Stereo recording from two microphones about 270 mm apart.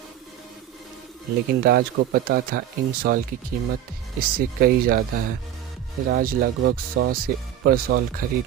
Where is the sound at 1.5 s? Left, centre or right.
Right.